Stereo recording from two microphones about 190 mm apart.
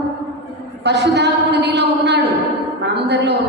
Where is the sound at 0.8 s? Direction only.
65° right (ahead or behind).